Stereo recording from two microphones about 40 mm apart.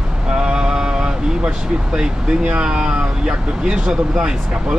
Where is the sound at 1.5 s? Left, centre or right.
Right.